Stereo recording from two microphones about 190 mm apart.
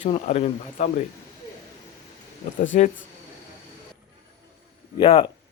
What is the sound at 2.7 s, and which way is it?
Speech, 45° left (ahead or behind).